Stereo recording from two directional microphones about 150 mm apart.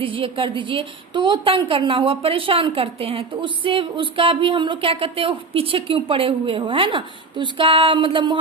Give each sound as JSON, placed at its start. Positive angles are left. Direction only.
{"t": 0.0, "sound": "a woman's voice", "side_deg": -35}